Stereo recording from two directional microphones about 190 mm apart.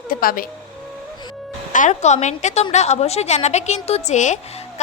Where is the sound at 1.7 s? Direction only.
40° left (ahead or behind).